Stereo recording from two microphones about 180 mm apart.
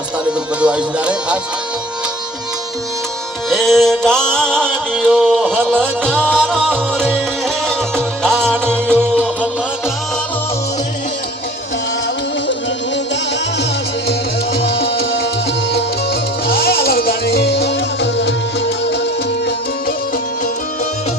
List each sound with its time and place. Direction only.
0.6 s speech: 5° right (ahead or behind)
3.5 s music: centre (ahead or behind)
6.1 s music: 5° left (ahead or behind)
8.2 s music: 5° left (ahead or behind)
8.6 s music: 10° right (ahead or behind)
14.7 s music: 65° left (ahead or behind)
16.5 s music: 60° left (ahead or behind); by 18.3 s 75° left (ahead or behind)